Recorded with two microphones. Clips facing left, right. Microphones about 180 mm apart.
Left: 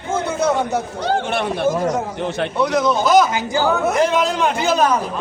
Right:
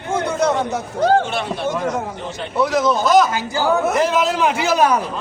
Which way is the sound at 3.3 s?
20° left (ahead or behind).